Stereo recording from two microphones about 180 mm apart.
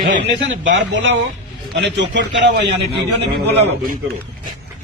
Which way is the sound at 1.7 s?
75° right (ahead or behind).